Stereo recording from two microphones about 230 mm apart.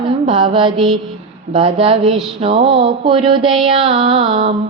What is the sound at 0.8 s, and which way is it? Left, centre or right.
Mantra, centre.